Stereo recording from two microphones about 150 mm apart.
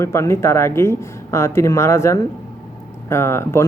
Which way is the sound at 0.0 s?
20° left (ahead or behind).